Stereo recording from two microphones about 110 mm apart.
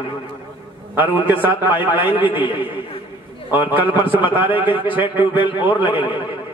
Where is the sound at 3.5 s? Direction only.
15° right (ahead or behind).